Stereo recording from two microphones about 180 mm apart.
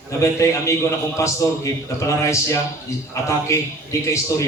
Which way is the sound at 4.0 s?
15° left (ahead or behind).